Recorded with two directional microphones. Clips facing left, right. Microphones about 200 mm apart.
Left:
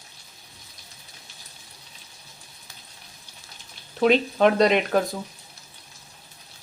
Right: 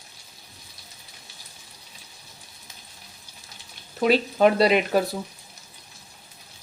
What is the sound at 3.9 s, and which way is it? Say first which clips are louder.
Speech: left 1 dB; 5° right (ahead or behind).